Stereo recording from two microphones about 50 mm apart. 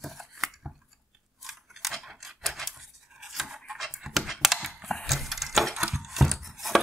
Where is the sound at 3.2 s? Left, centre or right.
Centre.